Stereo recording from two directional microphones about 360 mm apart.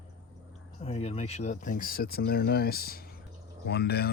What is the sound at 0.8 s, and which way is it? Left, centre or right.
Speech, centre.